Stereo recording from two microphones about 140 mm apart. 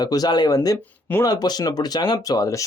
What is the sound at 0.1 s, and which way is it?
Speech, 30° left (ahead or behind).